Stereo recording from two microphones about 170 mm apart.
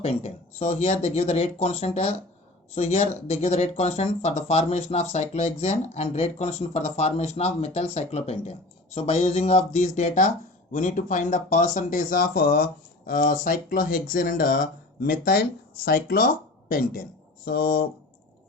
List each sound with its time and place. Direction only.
0.0 s speech: 35° left (ahead or behind); by 17.8 s 65° left (ahead or behind)